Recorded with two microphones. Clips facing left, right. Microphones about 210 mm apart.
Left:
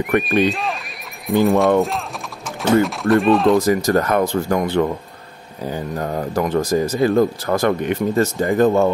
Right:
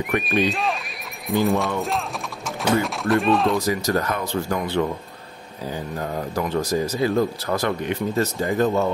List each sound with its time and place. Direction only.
0.2 s speech: centre (ahead or behind)
1.8 s clip-clop: centre (ahead or behind)
2.8 s speech: centre (ahead or behind)
3.5 s speech: 50° left (ahead or behind)
5.9 s speech: 50° left (ahead or behind)